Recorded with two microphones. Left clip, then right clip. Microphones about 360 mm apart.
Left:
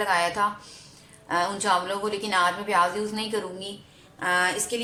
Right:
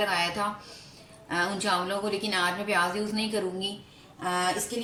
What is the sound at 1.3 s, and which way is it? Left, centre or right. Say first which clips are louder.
A woman's voice: left 4 dB; centre.